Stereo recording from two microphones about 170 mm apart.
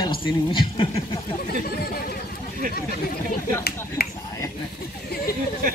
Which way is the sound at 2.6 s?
55° right (ahead or behind).